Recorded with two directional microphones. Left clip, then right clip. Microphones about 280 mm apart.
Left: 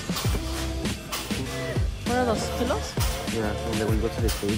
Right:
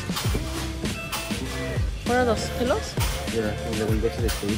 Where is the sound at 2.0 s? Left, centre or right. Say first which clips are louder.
Right 3 dB; centre.